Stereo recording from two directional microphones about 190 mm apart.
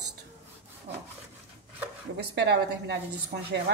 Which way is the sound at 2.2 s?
60° right (ahead or behind).